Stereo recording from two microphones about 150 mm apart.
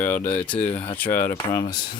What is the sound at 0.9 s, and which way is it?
Speech, 10° left (ahead or behind).